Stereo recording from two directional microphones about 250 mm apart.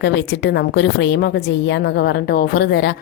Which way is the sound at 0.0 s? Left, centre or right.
Left.